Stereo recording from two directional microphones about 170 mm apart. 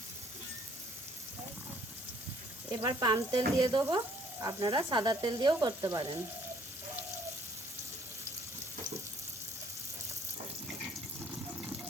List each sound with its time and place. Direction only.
2.6 s speech: 20° right (ahead or behind)